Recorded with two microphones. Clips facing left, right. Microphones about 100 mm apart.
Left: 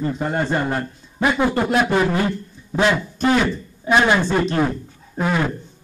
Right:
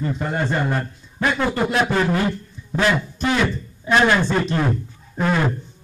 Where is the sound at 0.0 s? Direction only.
10° left (ahead or behind).